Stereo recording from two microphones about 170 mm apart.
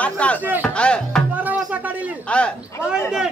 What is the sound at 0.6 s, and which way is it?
Music, 5° left (ahead or behind).